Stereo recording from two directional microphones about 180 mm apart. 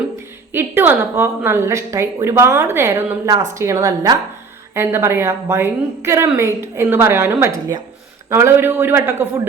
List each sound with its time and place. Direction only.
0.5 s a woman's voice: 10° right (ahead or behind)